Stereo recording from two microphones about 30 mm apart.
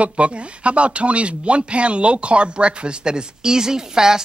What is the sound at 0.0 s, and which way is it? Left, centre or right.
Speech, right.